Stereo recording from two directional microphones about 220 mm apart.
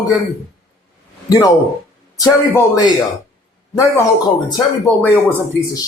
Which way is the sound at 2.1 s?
15° left (ahead or behind).